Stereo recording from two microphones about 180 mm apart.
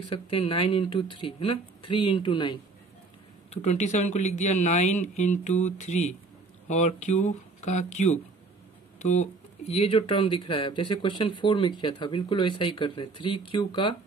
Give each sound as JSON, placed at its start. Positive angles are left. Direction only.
{"t": 0.1, "sound": "speech", "side_deg": 30}
{"t": 3.4, "sound": "speech", "side_deg": 35}